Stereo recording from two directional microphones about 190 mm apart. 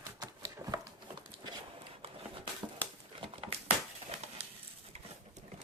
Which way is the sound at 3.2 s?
30° right (ahead or behind).